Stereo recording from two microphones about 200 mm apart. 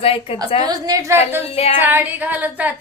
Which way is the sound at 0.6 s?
20° right (ahead or behind).